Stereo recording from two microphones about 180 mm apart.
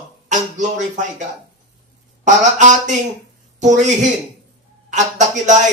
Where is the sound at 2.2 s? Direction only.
45° right (ahead or behind).